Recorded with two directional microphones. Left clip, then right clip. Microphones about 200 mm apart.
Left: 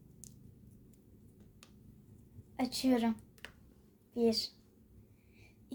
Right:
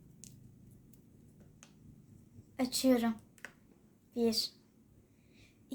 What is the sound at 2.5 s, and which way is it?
A woman's voice, 10° right (ahead or behind).